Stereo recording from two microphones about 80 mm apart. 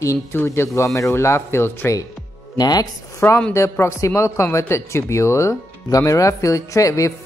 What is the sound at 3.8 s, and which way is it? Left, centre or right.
Speech, left.